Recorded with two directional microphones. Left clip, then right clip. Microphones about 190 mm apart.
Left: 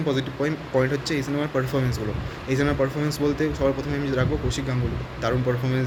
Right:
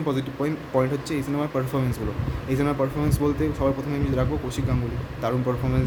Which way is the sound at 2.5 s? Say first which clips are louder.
Left 1 dB; 20° right (ahead or behind).